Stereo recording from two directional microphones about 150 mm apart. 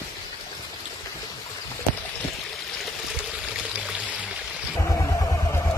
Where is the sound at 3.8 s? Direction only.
10° right (ahead or behind).